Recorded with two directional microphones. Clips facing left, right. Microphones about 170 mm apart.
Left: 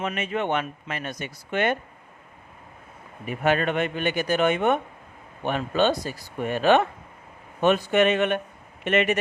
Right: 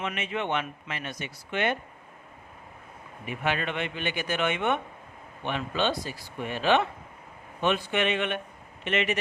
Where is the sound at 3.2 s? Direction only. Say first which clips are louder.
Left 7 dB; 45° left (ahead or behind).